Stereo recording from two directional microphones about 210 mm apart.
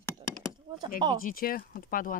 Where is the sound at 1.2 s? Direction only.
45° left (ahead or behind).